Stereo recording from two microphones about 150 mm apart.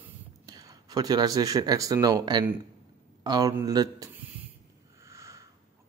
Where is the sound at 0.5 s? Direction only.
25° right (ahead or behind).